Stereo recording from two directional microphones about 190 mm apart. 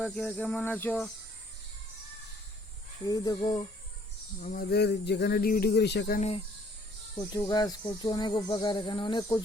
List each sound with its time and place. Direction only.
0.0 s a sound: 5° left (ahead or behind)
3.0 s speech: 20° left (ahead or behind)
4.4 s speech: 40° left (ahead or behind)
4.7 s speech: 60° left (ahead or behind)
6.1 s speech: 35° left (ahead or behind)
7.3 s speech: 20° left (ahead or behind)